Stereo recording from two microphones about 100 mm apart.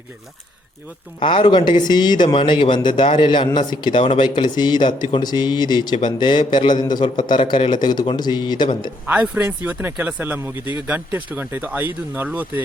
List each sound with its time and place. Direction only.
1.2 s speech: 60° left (ahead or behind)
9.0 s speech: 10° right (ahead or behind)